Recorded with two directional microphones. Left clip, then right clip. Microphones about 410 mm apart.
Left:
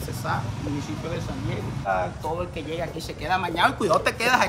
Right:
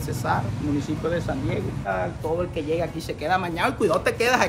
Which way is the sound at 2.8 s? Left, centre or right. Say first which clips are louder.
Right 3 dB; centre.